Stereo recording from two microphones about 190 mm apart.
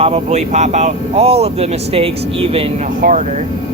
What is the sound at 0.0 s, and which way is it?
Speech, 35° right (ahead or behind).